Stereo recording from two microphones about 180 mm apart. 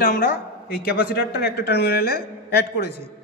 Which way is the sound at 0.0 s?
55° left (ahead or behind).